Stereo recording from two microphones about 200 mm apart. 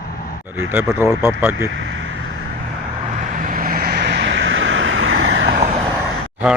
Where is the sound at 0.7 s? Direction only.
10° right (ahead or behind).